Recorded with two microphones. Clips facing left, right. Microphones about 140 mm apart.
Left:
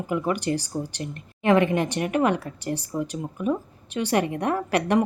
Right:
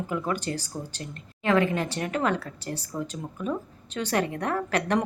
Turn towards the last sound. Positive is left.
turn(degrees=10)  # may be behind; listen again after turning